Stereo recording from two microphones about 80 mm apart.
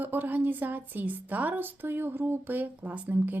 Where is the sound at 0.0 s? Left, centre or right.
Right.